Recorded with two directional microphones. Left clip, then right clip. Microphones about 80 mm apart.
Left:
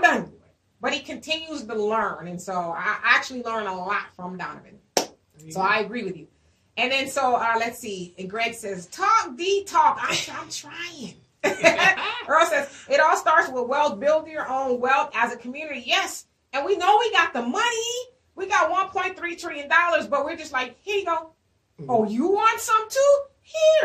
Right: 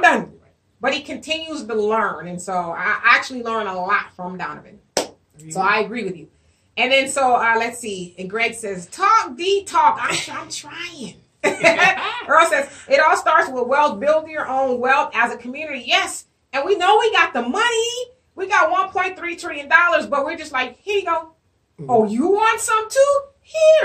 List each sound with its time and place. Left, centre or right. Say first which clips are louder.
0.7 s a woman's voice: right 5 dB; left
12.0 s speech: right 3 dB; right
12.3 s a woman's voice: right 5 dB; left